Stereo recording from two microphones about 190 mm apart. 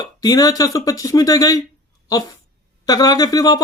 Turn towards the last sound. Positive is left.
turn(degrees=20)  # may be behind; listen again after turning